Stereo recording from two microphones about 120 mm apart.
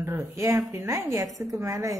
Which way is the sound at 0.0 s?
20° right (ahead or behind).